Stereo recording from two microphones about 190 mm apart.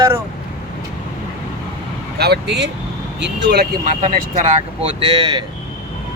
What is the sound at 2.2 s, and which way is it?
Speech, 60° right (ahead or behind).